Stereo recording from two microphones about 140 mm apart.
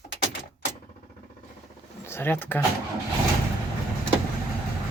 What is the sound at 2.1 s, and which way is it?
Speech, 15° left (ahead or behind).